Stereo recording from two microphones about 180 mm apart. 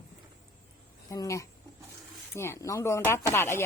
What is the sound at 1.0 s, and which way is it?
Speech, 20° left (ahead or behind).